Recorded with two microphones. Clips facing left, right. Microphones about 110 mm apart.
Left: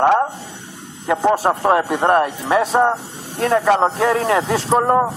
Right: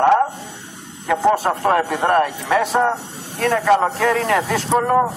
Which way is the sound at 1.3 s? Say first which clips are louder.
Left 2 dB; 30° left (ahead or behind).